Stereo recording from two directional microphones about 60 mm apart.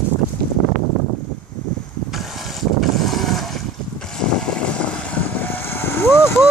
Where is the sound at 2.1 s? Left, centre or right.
Centre.